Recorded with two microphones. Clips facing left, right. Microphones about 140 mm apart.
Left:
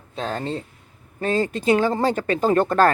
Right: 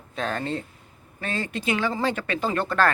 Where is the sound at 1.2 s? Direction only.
40° left (ahead or behind).